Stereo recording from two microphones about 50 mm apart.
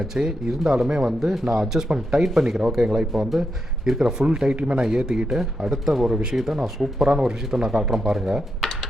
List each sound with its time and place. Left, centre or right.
0.1 s speech: centre
3.1 s speech: centre